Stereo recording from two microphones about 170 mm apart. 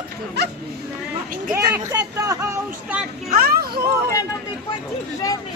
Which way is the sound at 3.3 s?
60° right (ahead or behind).